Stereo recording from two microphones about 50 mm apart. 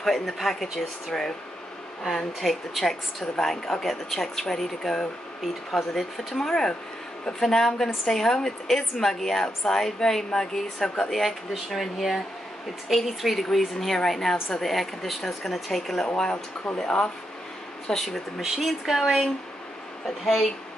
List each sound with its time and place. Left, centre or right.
0.0 s a woman's voice: centre
16.7 s speech: centre
18.4 s a woman's voice: centre